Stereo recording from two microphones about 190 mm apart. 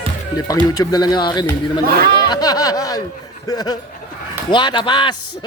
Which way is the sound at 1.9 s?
55° right (ahead or behind).